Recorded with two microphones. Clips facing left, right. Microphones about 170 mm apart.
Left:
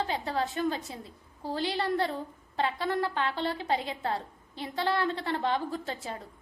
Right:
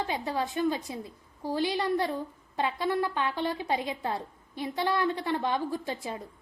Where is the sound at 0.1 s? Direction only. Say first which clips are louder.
Even; 15° right (ahead or behind).